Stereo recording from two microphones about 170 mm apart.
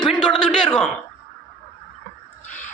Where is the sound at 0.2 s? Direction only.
5° left (ahead or behind).